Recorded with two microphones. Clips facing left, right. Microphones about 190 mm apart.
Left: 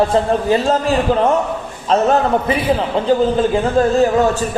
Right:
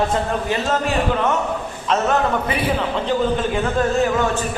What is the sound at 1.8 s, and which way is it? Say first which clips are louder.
A man's voice: left 5 dB; 35° left (ahead or behind).